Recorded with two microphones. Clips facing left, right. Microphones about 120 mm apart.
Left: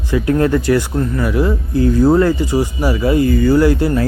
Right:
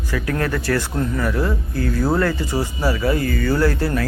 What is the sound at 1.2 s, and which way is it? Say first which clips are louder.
Speech: left 5 dB; 10° left (ahead or behind).